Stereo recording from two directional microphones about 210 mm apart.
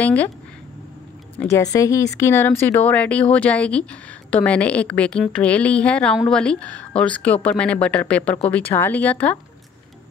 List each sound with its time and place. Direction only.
0.0 s speech: 5° left (ahead or behind)
1.4 s a woman's voice: 15° left (ahead or behind)